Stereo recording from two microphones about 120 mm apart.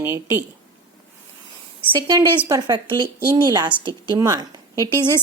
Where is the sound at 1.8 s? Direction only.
35° right (ahead or behind).